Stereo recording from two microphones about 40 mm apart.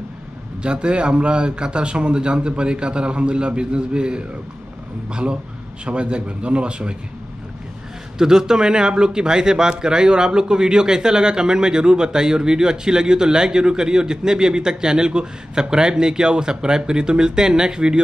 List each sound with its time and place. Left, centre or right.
0.6 s speech: right
8.2 s speech: centre